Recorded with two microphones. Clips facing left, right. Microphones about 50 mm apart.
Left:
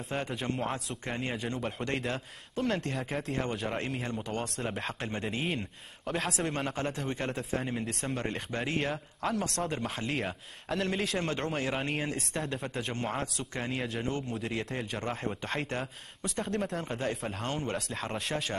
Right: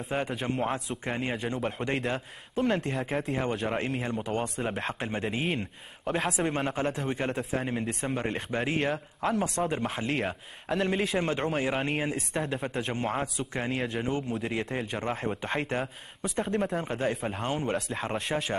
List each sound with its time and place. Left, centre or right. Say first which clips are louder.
0.1 s a man's voice: right 3 dB; centre